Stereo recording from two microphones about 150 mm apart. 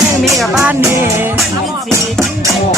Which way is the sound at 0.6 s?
15° right (ahead or behind).